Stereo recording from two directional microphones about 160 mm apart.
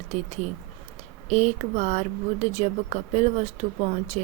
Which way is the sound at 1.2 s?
45° right (ahead or behind).